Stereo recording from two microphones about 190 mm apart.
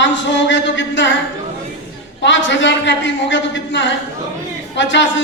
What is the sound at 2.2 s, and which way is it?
A man's voice, 75° left (ahead or behind).